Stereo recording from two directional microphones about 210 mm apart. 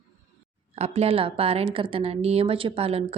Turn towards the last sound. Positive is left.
turn(degrees=-25)  # may be behind; listen again after turning